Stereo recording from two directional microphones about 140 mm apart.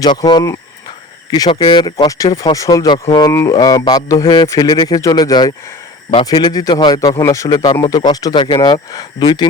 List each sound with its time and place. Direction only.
0.0 s a man's voice: 30° left (ahead or behind)